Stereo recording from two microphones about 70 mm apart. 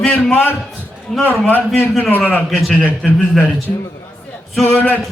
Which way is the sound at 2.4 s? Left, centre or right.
Centre.